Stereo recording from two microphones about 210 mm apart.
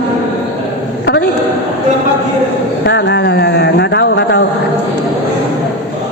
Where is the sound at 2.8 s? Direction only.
50° left (ahead or behind).